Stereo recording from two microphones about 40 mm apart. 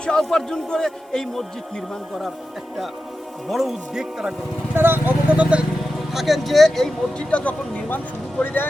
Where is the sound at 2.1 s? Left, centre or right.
Centre.